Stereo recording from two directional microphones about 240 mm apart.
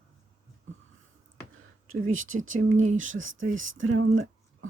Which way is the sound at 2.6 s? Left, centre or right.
Right.